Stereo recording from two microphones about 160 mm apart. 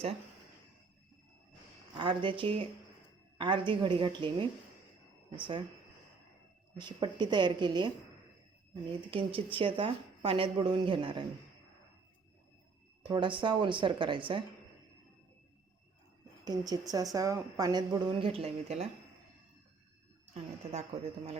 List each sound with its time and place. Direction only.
2.0 s a woman's voice: 30° right (ahead or behind)
6.7 s a woman's voice: 30° right (ahead or behind)
9.0 s speech: 35° right (ahead or behind)
13.0 s speech: 30° right (ahead or behind)
16.4 s a woman's voice: 25° right (ahead or behind); by 18.9 s 40° right (ahead or behind)
20.4 s a woman's voice: 45° right (ahead or behind)